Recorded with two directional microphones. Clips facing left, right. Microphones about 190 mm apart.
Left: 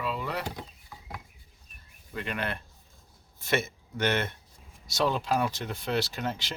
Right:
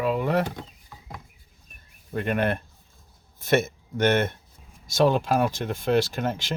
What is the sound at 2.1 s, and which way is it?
Speech, 50° right (ahead or behind).